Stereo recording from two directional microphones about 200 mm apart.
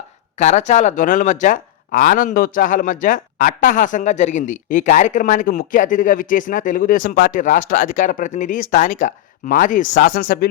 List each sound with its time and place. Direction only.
0.3 s speech: 35° left (ahead or behind)